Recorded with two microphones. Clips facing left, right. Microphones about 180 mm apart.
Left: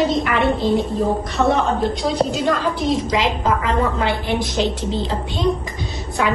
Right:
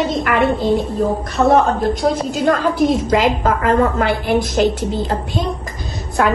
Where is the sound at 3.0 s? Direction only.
55° right (ahead or behind).